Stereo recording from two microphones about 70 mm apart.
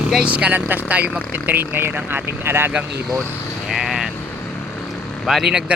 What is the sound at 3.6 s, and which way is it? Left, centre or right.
Speech, centre.